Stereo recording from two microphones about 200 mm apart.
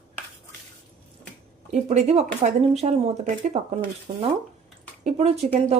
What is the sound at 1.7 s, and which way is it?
Speech, 35° right (ahead or behind).